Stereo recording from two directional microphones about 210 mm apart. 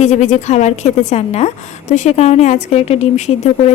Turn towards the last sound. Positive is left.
turn(degrees=30)  # may be behind; listen again after turning